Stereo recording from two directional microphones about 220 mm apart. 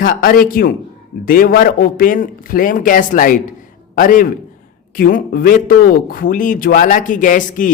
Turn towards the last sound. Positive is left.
turn(degrees=35)  # may be behind; listen again after turning